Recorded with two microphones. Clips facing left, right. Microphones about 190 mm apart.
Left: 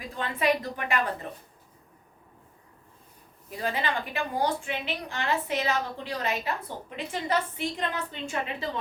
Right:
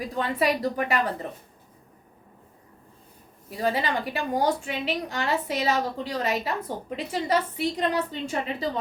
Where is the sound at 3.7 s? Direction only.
35° right (ahead or behind).